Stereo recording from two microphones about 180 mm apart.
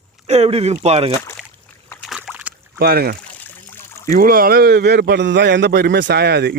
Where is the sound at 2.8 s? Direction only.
60° right (ahead or behind).